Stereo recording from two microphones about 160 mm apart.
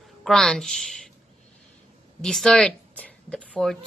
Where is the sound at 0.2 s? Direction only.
5° left (ahead or behind).